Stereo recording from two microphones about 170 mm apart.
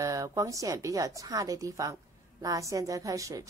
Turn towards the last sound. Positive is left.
turn(degrees=-20)  # may be behind; listen again after turning